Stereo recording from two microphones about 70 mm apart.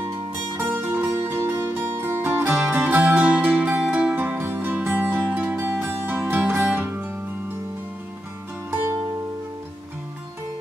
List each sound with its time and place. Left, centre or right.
0.6 s music: right